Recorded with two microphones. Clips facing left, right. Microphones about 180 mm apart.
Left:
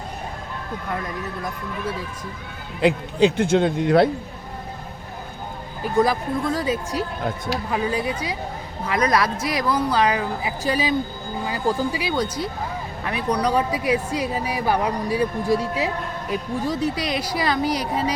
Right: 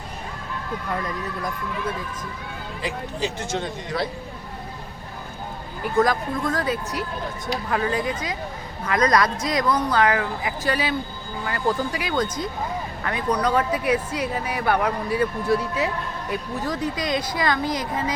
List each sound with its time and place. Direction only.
2.8 s a man's voice: 60° left (ahead or behind)
6.0 s speech: 10° left (ahead or behind)
17.2 s speech: 10° left (ahead or behind)